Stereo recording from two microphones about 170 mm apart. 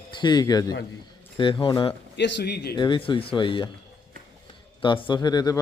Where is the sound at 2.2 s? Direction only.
90° left; by 2.8 s 70° left (ahead or behind).